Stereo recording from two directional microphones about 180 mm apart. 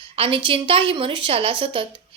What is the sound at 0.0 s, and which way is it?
A woman's voice, 30° right (ahead or behind).